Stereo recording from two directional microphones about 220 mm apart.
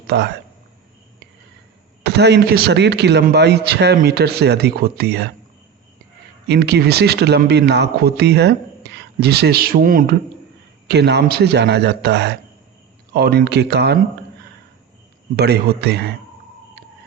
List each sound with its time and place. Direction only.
0.1 s speech: 50° right (ahead or behind)
2.0 s speech: 50° right (ahead or behind)
6.5 s speech: 50° right (ahead or behind)
10.8 s speech: 50° right (ahead or behind)
15.4 s speech: 45° right (ahead or behind)